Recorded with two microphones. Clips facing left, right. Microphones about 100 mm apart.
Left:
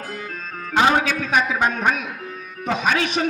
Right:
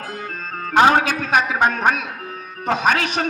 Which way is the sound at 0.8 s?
40° right (ahead or behind).